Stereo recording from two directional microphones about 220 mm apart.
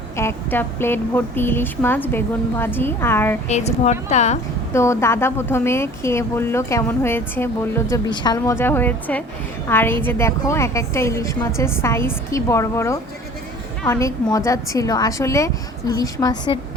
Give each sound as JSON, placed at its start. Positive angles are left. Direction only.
{"t": 0.2, "sound": "a woman's voice", "side_deg": 10}
{"t": 3.5, "sound": "a woman's voice", "side_deg": 30}
{"t": 4.7, "sound": "a woman's voice", "side_deg": 10}